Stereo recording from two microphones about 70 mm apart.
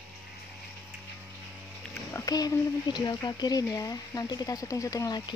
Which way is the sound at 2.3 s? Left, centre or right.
Left.